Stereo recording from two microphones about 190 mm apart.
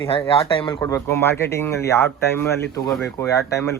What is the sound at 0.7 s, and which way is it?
Speech, 15° left (ahead or behind).